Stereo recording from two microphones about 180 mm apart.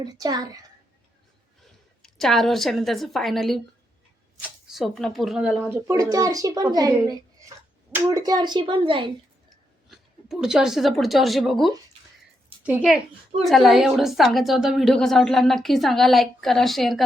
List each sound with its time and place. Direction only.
0.0 s speech: 20° right (ahead or behind)
2.0 s a woman's voice: centre (ahead or behind); by 9.0 s 30° right (ahead or behind)
9.9 s a woman's voice: centre (ahead or behind)